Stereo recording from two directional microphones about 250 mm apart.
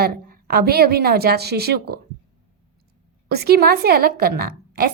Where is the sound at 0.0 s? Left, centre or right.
Right.